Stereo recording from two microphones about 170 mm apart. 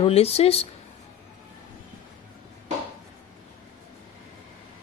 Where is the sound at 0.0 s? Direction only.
35° left (ahead or behind).